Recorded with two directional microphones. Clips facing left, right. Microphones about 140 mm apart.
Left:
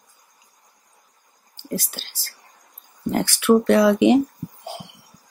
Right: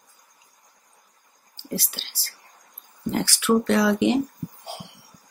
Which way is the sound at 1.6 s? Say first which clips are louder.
Left 3 dB; 45° left (ahead or behind).